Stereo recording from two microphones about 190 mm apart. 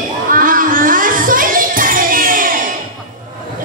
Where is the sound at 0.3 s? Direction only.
45° right (ahead or behind).